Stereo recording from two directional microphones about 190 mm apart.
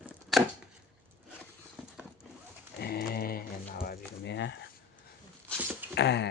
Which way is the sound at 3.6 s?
50° left (ahead or behind).